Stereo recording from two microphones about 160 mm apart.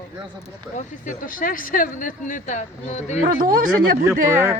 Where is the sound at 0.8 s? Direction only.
55° left (ahead or behind).